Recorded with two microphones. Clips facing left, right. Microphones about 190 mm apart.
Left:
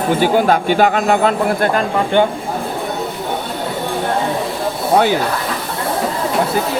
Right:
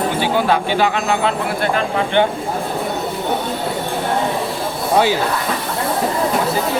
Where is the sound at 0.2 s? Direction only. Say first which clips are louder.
Left 3 dB; 45° left (ahead or behind).